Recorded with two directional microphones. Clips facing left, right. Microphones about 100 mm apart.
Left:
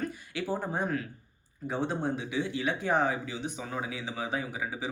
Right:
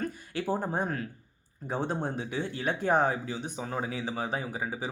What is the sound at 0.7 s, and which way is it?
Speech, 40° right (ahead or behind).